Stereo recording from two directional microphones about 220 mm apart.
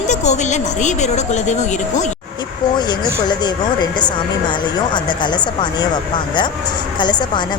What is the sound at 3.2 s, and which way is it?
Speech, 20° left (ahead or behind).